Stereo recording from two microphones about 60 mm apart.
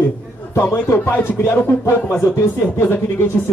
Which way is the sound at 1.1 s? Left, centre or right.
Left.